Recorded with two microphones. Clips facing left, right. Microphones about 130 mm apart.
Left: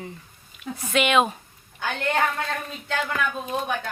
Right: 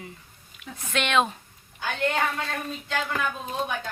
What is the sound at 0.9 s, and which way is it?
Speech, 10° left (ahead or behind).